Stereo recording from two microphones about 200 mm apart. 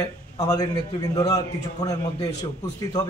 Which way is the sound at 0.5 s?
20° left (ahead or behind).